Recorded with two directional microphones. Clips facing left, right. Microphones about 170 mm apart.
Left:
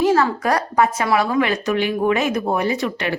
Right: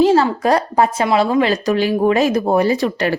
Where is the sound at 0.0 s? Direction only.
30° right (ahead or behind).